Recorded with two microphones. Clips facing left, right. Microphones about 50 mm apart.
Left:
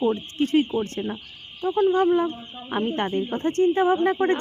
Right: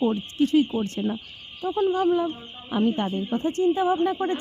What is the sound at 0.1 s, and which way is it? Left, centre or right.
Speech, left.